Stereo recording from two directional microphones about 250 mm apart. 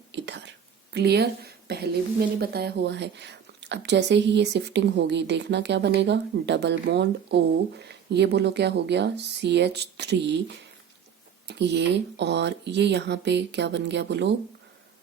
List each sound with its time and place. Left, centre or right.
0.1 s whispering: right
0.9 s speech: right
11.4 s speech: right